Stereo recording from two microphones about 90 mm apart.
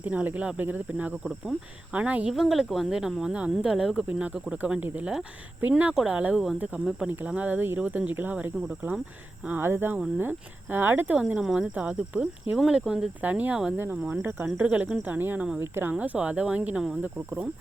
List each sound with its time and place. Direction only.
0.0 s speech: 20° right (ahead or behind)
2.3 s speech: centre (ahead or behind)
3.9 s speech: 15° right (ahead or behind)
5.9 s speech: 5° right (ahead or behind)